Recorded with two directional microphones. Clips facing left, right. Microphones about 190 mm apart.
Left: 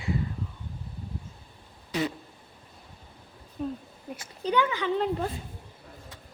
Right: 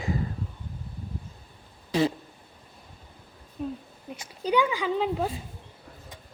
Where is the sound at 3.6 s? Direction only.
5° right (ahead or behind).